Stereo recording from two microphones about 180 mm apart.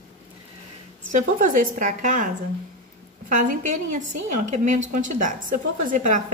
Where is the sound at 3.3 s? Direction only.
45° right (ahead or behind).